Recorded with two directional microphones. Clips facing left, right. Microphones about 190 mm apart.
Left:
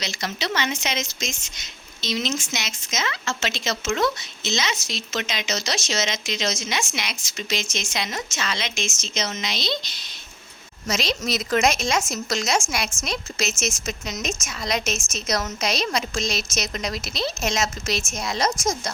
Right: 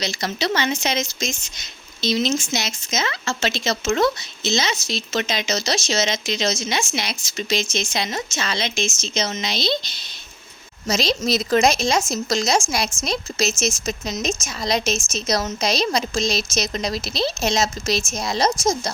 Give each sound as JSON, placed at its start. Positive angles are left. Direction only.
{"t": 0.0, "sound": "speech", "side_deg": -35}